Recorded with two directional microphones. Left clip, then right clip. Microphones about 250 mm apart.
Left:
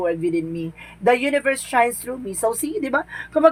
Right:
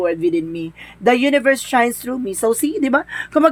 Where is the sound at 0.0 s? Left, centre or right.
Right.